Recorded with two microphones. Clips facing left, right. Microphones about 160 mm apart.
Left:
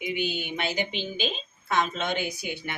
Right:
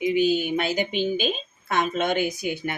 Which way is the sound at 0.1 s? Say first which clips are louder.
Right 8 dB; 40° right (ahead or behind).